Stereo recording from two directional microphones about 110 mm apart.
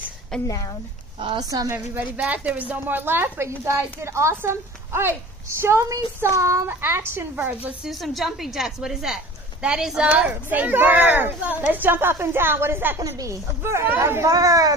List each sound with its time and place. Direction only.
0.3 s a woman's voice: 5° left (ahead or behind)
1.7 s a woman's voice: 15° right (ahead or behind)
7.8 s a woman's voice: centre (ahead or behind); by 14.8 s 30° right (ahead or behind)